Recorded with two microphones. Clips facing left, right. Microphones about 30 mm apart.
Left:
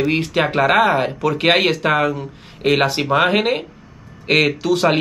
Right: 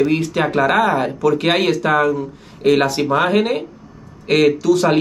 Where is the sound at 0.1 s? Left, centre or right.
Left.